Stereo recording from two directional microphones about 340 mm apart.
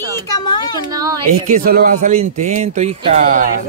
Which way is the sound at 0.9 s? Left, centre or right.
Centre.